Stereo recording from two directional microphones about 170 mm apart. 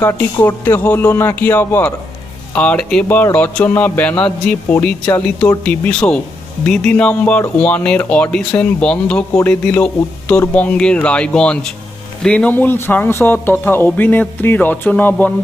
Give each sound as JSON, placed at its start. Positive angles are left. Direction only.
{"t": 0.0, "sound": "a man's voice", "side_deg": 15}